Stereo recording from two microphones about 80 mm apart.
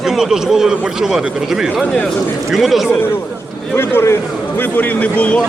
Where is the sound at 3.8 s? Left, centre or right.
Left.